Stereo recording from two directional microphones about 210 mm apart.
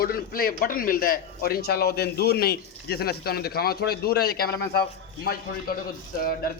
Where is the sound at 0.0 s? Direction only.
45° left (ahead or behind).